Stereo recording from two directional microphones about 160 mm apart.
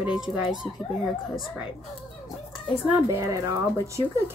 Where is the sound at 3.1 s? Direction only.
20° right (ahead or behind).